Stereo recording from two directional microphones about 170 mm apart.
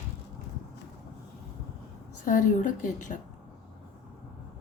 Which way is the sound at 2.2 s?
50° left (ahead or behind).